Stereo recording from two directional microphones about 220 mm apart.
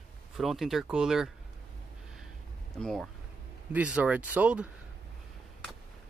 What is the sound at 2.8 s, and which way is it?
Speech, centre (ahead or behind).